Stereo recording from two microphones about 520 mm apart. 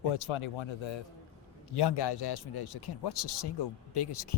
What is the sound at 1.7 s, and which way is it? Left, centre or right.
Speech, left.